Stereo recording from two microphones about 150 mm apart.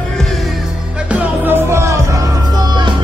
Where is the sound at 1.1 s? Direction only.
15° right (ahead or behind).